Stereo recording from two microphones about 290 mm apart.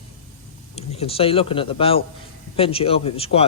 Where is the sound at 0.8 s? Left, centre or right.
Centre.